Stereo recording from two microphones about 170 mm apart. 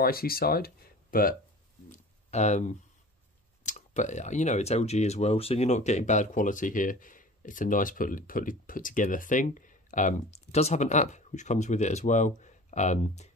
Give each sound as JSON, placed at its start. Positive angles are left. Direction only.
{"t": 0.0, "sound": "speech", "side_deg": 60}
{"t": 1.9, "sound": "a sound", "side_deg": 45}
{"t": 3.6, "sound": "speech", "side_deg": 45}